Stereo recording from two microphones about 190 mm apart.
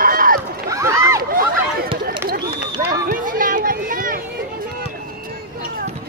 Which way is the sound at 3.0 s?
45° right (ahead or behind).